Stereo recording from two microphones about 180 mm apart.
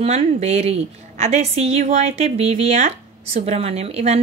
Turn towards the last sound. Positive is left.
turn(degrees=-35)  # may be behind; listen again after turning